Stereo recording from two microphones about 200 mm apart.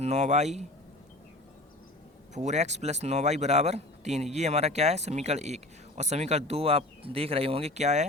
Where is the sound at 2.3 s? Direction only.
35° right (ahead or behind).